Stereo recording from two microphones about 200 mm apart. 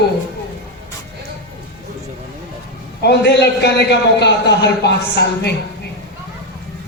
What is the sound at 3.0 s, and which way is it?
A man's voice, 55° left (ahead or behind).